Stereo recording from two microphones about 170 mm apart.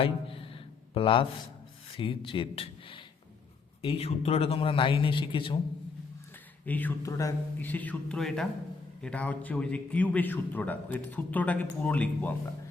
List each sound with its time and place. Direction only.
0.0 s a sound: 35° left (ahead or behind)
2.0 s a man's voice: 30° left (ahead or behind)
6.7 s a man's voice: 10° left (ahead or behind)